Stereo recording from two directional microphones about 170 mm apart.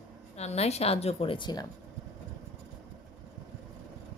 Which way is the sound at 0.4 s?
40° left (ahead or behind).